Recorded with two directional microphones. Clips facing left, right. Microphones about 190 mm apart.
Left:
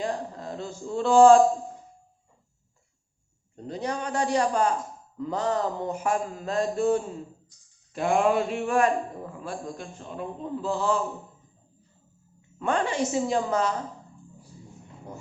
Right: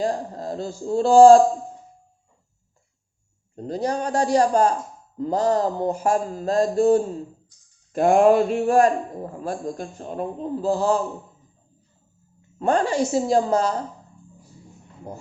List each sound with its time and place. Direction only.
0.0 s speech: 35° right (ahead or behind)
3.5 s a man's voice: 40° right (ahead or behind)
12.5 s a man's voice: 35° right (ahead or behind)